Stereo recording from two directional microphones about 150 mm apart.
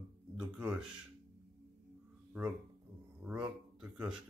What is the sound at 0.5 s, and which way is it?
Speech, 5° right (ahead or behind).